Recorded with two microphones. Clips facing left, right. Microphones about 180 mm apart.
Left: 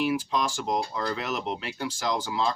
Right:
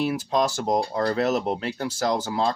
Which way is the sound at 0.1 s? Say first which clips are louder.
Right 4 dB; 40° right (ahead or behind).